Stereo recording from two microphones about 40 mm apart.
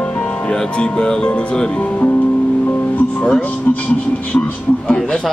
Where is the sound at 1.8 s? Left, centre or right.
Left.